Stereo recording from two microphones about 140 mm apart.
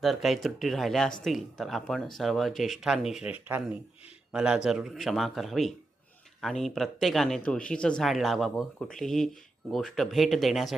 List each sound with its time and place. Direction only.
0.0 s speech: centre (ahead or behind)